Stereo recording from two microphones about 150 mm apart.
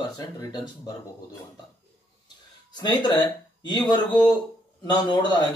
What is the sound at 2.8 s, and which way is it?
Speech, 30° left (ahead or behind).